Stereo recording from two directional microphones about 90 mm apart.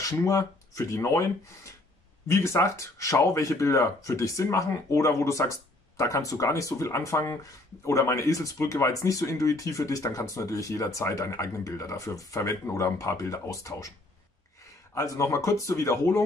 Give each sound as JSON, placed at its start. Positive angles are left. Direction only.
{"t": 0.0, "sound": "speech", "side_deg": 35}
{"t": 15.0, "sound": "speech", "side_deg": 35}